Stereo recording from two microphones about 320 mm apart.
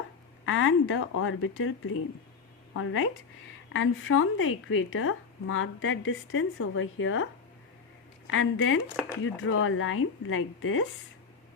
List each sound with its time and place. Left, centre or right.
0.4 s a woman's voice: left
8.3 s a woman's voice: left